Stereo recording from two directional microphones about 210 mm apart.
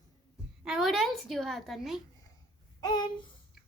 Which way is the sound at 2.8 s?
20° left (ahead or behind).